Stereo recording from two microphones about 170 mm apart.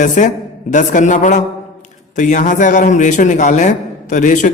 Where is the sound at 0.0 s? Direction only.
50° left (ahead or behind).